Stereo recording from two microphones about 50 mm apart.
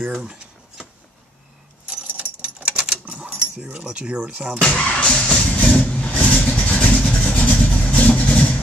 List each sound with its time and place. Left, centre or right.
0.0 s a sound: centre
2.0 s keys jangling: right
3.8 s speech: right
4.6 s speech: left
5.8 s vehicle: left